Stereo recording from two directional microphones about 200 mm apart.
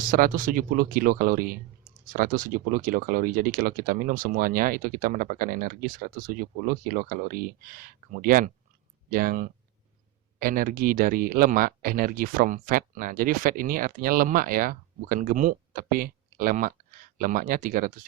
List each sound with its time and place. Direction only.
0.0 s speech: 45° right (ahead or behind)